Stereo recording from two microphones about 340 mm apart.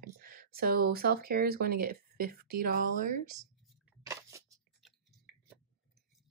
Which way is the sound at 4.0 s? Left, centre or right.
Centre.